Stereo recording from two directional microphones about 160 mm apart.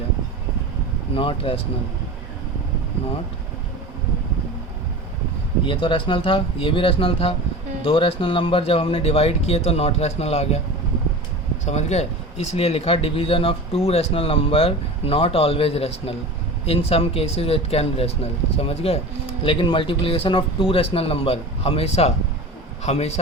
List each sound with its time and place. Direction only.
1.1 s speech: 35° left (ahead or behind)
5.6 s speech: 30° left (ahead or behind)
11.6 s speech: 45° left (ahead or behind)